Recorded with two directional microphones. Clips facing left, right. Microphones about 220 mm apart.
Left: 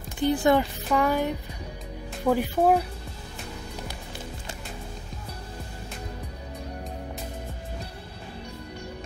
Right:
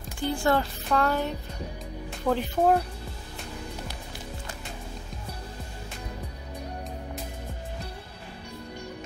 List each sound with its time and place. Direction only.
0.2 s speech: 20° left (ahead or behind)